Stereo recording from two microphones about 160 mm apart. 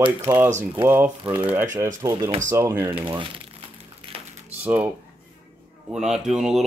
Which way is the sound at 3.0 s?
30° right (ahead or behind).